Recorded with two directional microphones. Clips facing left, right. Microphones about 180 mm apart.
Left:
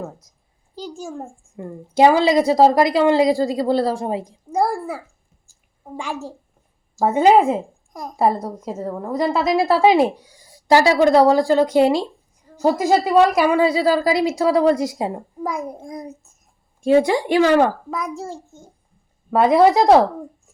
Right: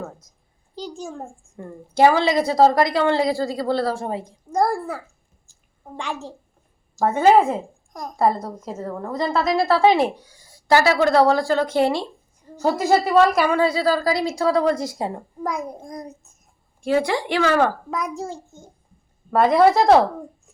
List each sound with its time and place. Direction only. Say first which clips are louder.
0.8 s a child's voice: left 1 dB; 5° left (ahead or behind)
1.5 s a woman's voice: left 3 dB; 15° left (ahead or behind)
5.5 s a sound: left 4 dB; 5° left (ahead or behind)
6.9 s a woman's voice: left 1 dB; 10° left (ahead or behind)
16.8 s speech: left 5 dB; 20° left (ahead or behind)
17.9 s a child's voice: even; centre (ahead or behind)